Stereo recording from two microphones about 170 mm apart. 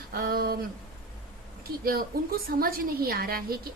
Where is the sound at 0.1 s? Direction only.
60° right (ahead or behind).